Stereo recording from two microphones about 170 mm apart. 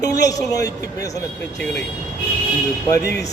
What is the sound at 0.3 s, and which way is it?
Speech, 20° left (ahead or behind).